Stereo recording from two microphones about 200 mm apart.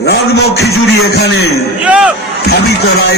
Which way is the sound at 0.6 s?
55° left (ahead or behind).